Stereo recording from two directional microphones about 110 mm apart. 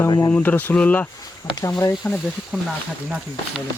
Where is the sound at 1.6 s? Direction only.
30° left (ahead or behind).